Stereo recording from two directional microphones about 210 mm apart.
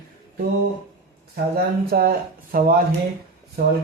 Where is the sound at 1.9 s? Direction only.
45° right (ahead or behind).